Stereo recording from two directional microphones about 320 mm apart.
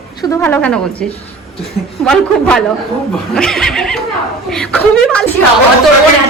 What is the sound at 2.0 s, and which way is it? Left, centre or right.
A woman's voice, centre.